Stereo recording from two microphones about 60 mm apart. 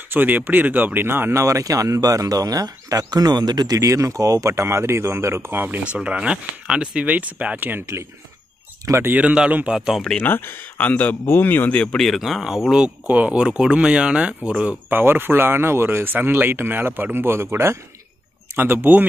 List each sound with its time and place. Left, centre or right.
0.1 s speech: right
1.4 s speech: right
5.9 s speech: centre
8.9 s speech: right
9.2 s speech: centre
9.8 s speech: centre
10.1 s a man's voice: left
12.0 s speech: centre
13.0 s speech: right
14.9 s speech: right
18.6 s speech: right